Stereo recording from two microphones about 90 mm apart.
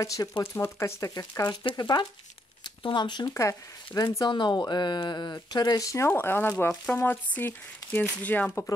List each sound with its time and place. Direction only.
0.0 s speech: 40° left (ahead or behind)
1.1 s speech: 45° left (ahead or behind)
3.3 s speech: 40° left (ahead or behind); by 8.6 s 20° left (ahead or behind)